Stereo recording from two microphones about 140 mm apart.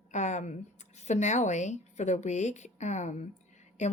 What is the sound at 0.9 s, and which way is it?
A woman's voice, 55° left (ahead or behind).